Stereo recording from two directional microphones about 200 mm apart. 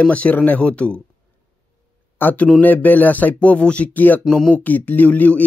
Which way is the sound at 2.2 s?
10° left (ahead or behind).